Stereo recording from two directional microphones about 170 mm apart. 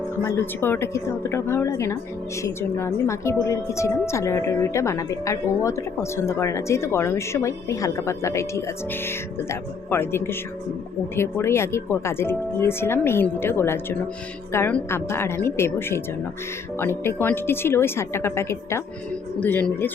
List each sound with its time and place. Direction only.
0.3 s speech: 15° left (ahead or behind)